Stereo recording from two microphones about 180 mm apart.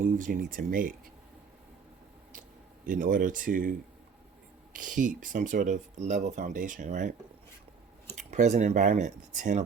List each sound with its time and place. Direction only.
0.0 s speech: 45° right (ahead or behind)
2.8 s speech: 45° right (ahead or behind)